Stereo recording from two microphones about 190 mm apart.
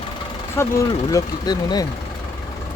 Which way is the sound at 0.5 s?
15° left (ahead or behind).